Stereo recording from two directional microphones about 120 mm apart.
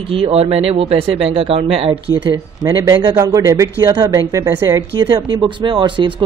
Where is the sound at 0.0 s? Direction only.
50° right (ahead or behind).